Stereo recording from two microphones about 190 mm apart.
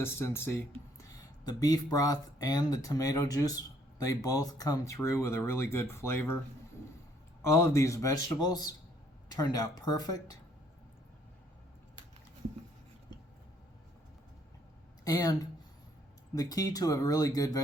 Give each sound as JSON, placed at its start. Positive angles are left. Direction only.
{"t": 0.0, "sound": "a man's voice", "side_deg": 10}
{"t": 7.4, "sound": "a man's voice", "side_deg": 15}
{"t": 15.0, "sound": "speech", "side_deg": 20}